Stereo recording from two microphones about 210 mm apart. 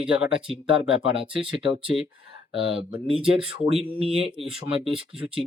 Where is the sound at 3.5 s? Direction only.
25° right (ahead or behind).